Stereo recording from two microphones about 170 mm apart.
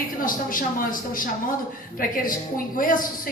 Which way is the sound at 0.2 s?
55° left (ahead or behind).